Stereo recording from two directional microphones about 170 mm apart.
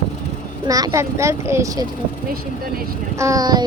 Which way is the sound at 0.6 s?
20° right (ahead or behind).